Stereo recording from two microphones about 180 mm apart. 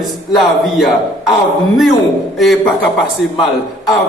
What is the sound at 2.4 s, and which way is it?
Speech, centre (ahead or behind).